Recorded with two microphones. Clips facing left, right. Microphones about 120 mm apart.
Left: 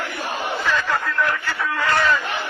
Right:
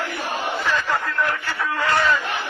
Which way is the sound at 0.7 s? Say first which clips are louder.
Left 1 dB; 15° right (ahead or behind).